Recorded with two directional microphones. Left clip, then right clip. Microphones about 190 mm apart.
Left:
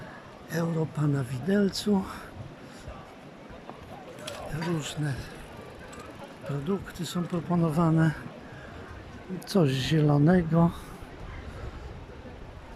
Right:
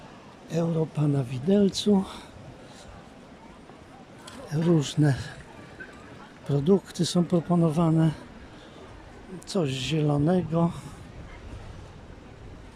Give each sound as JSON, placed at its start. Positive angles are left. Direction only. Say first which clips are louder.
{"t": 0.5, "sound": "speech", "louder": "right 3 dB", "side_deg": -15}
{"t": 4.4, "sound": "speech", "louder": "right 9 dB", "side_deg": -30}
{"t": 6.5, "sound": "speech", "louder": "right 9 dB", "side_deg": -30}
{"t": 7.5, "sound": "speech", "louder": "left 1 dB", "side_deg": -15}
{"t": 9.5, "sound": "speech", "louder": "left 2 dB", "side_deg": 0}